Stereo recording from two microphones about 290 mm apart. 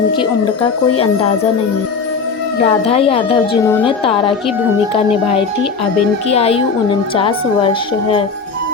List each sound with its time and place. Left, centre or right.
2.6 s a woman's voice: left
6.2 s a woman's voice: left